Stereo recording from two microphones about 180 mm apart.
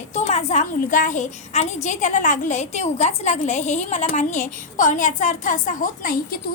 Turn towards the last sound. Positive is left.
turn(degrees=50)  # may be behind; listen again after turning